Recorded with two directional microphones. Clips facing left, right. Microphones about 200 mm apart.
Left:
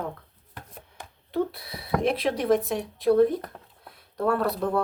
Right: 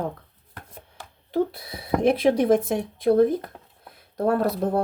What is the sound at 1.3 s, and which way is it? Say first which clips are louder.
Speech: right 3 dB; 45° right (ahead or behind).